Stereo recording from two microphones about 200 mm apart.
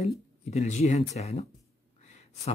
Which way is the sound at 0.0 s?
30° left (ahead or behind).